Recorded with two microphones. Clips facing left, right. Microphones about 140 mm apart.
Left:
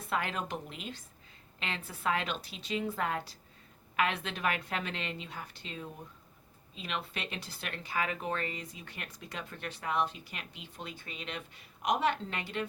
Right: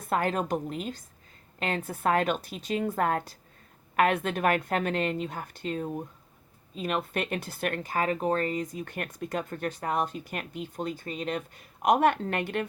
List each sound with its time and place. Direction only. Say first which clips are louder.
0.0 s speech: right 7 dB; 45° right (ahead or behind)